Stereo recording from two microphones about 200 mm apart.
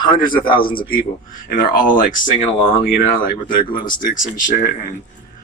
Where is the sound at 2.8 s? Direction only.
45° left (ahead or behind).